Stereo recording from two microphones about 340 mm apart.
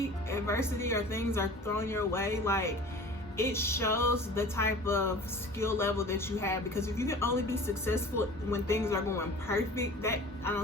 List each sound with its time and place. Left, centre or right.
0.0 s speech: centre